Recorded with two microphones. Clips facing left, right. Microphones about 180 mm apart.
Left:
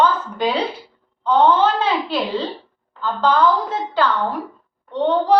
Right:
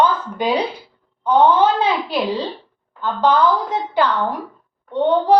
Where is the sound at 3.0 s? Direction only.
15° right (ahead or behind).